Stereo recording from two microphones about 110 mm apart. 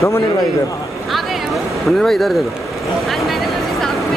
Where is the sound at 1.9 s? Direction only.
Centre (ahead or behind).